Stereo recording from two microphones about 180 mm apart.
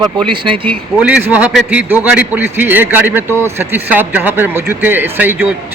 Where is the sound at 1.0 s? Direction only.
10° right (ahead or behind).